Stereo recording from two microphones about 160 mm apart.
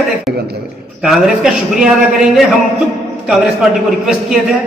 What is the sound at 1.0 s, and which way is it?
A man's voice, 5° right (ahead or behind).